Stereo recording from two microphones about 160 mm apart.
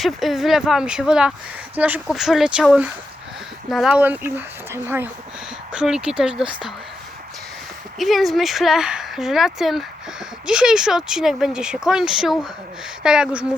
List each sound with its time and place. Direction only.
0.0 s speech: centre (ahead or behind)
7.9 s speech: centre (ahead or behind)